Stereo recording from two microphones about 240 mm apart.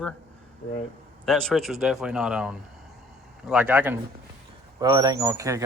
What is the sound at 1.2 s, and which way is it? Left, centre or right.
A man's voice, centre.